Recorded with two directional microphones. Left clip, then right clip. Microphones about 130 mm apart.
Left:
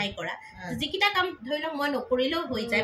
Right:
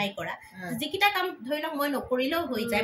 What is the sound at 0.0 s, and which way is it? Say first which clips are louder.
Speech: even; 25° right (ahead or behind).